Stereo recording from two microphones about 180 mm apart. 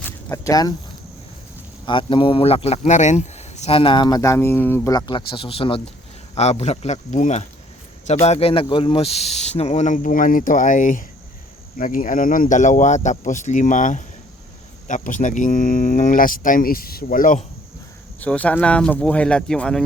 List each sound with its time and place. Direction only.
0.0 s a sound: 15° left (ahead or behind)
1.9 s speech: 30° left (ahead or behind); by 17.4 s 50° left (ahead or behind)
18.2 s speech: 10° left (ahead or behind)